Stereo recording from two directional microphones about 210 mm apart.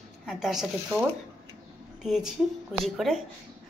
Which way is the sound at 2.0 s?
Centre (ahead or behind).